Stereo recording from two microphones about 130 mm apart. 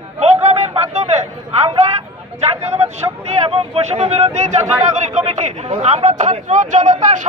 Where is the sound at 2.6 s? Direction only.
55° right (ahead or behind).